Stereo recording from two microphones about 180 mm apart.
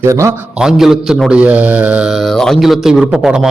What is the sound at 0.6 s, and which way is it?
A man's voice, 5° right (ahead or behind).